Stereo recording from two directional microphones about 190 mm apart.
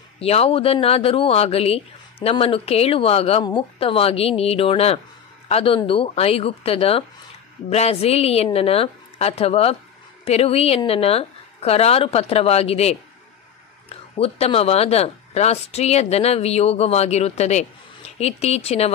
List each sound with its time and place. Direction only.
0.2 s speech: 30° left (ahead or behind)